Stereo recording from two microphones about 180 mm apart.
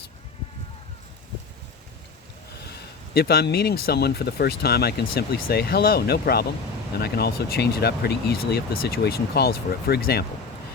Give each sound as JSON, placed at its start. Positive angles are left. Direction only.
{"t": 3.2, "sound": "speech", "side_deg": 60}